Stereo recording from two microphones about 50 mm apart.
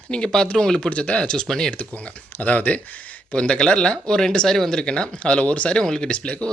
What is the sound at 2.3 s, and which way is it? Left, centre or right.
Speech, left.